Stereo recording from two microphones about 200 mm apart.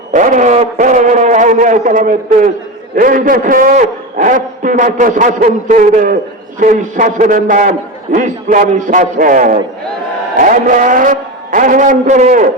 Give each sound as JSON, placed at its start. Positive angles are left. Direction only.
{"t": 0.1, "sound": "a man's voice", "side_deg": -40}